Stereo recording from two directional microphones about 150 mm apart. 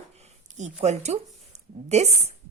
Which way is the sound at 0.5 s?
50° right (ahead or behind).